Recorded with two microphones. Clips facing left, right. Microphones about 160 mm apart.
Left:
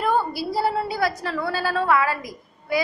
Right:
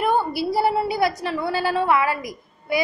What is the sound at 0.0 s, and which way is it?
Child singing, 20° right (ahead or behind).